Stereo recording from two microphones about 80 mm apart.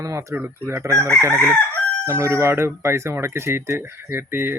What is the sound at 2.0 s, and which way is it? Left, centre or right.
Speech, right.